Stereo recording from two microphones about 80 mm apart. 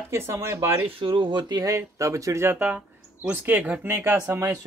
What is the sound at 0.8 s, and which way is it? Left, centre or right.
Speech, right.